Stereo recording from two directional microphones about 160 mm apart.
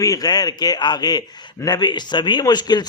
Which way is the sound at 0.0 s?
25° left (ahead or behind).